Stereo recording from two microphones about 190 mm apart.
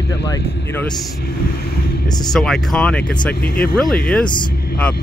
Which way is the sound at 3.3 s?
55° left (ahead or behind).